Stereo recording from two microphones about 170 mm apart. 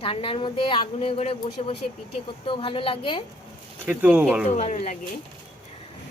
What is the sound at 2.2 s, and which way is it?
A woman's voice, 30° left (ahead or behind).